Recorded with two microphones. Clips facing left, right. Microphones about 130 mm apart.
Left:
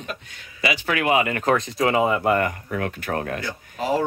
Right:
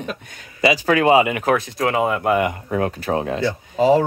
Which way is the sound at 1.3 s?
5° right (ahead or behind).